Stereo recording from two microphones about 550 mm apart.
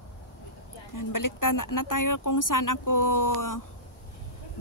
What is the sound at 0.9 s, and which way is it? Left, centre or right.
A woman's voice, left.